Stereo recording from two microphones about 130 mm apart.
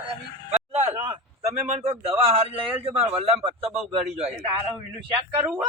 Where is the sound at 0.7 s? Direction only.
60° right (ahead or behind).